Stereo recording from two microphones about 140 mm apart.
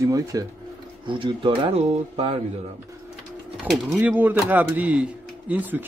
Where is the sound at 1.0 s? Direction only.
35° right (ahead or behind).